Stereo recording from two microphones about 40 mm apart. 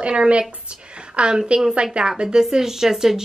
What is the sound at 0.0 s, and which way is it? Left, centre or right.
A woman's voice, right.